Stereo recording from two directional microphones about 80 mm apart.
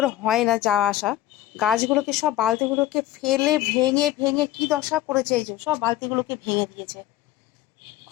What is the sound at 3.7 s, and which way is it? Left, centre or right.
Music, right.